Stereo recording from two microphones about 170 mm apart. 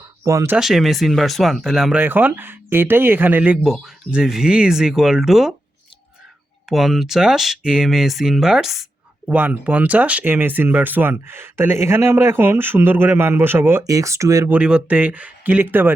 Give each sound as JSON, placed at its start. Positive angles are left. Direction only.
{"t": 0.3, "sound": "speech", "side_deg": -20}
{"t": 0.5, "sound": "speech", "side_deg": 0}
{"t": 6.7, "sound": "speech", "side_deg": 0}